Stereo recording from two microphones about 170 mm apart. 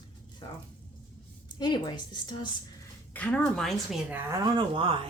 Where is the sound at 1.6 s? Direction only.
25° left (ahead or behind).